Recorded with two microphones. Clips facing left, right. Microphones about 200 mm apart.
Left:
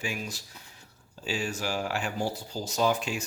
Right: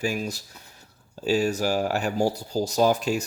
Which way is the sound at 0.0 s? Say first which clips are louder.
Right 8 dB; 40° right (ahead or behind).